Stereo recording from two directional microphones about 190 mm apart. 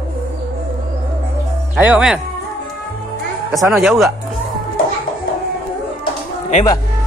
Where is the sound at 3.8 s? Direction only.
Centre (ahead or behind).